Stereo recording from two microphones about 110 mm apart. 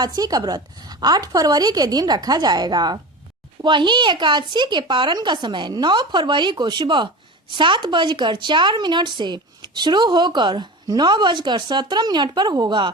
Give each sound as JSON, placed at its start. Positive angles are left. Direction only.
{"t": 0.0, "sound": "a woman's voice", "side_deg": -35}